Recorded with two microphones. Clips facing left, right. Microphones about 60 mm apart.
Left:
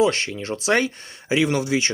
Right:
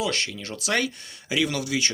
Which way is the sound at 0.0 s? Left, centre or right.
Left.